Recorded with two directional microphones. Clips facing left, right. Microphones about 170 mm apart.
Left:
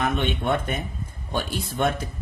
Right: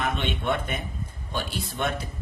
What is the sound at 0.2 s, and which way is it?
Speech, 45° left (ahead or behind).